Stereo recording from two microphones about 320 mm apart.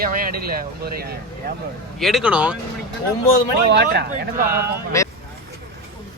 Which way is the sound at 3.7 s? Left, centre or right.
Right.